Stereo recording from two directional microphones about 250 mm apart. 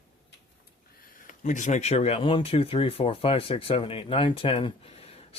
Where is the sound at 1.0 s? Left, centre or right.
Left.